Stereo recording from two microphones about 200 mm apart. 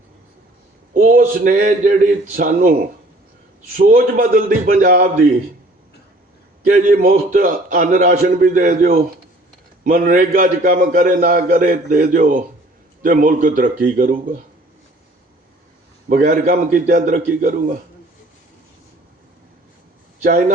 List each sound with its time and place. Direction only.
0.9 s a man's voice: 40° right (ahead or behind)
3.8 s a man's voice: 40° right (ahead or behind)
6.7 s a man's voice: 40° right (ahead or behind)
16.0 s a man's voice: 45° right (ahead or behind)